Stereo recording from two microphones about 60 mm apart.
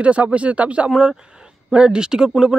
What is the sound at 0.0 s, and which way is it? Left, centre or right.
Speech, right.